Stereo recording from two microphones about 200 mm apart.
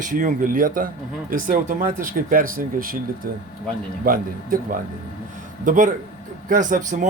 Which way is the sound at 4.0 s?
45° right (ahead or behind).